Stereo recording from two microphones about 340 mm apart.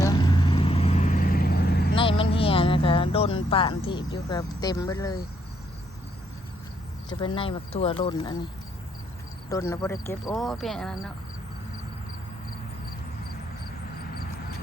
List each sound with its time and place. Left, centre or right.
0.0 s vehicle: centre
2.0 s speech: centre
7.1 s speech: centre
9.5 s speech: centre